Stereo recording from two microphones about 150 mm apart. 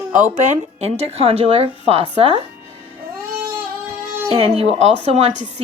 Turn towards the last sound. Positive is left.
turn(degrees=-45)  # may be behind; listen again after turning